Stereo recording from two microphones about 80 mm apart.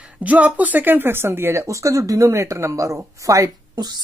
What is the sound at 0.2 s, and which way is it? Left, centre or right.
Speech, centre.